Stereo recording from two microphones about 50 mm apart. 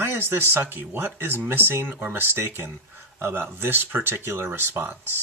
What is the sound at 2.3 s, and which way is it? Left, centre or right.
Speech, right.